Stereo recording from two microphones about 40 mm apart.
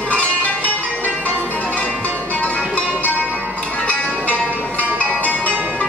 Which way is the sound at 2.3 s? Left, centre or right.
Left.